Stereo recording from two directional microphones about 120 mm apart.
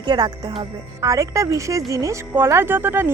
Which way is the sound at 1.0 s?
25° right (ahead or behind).